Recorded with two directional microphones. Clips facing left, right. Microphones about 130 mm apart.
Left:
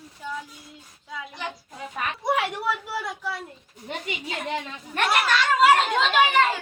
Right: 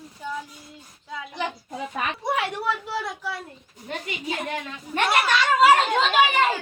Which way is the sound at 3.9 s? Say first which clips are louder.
Right 2 dB; 20° left (ahead or behind).